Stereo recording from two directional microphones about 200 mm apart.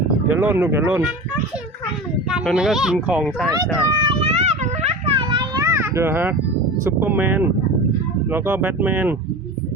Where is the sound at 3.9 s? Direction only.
25° right (ahead or behind).